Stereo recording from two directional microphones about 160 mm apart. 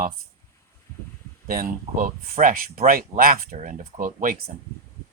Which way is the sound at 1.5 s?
65° right (ahead or behind).